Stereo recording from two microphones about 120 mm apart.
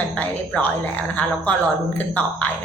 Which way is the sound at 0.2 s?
15° left (ahead or behind).